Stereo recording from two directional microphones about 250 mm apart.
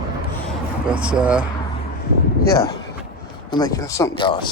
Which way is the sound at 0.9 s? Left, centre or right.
Centre.